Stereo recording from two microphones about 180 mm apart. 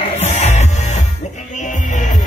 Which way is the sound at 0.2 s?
40° left (ahead or behind).